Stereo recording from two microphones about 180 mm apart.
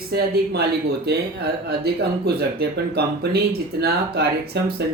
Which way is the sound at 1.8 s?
65° right (ahead or behind).